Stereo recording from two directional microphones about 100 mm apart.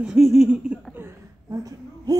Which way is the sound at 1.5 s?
35° right (ahead or behind).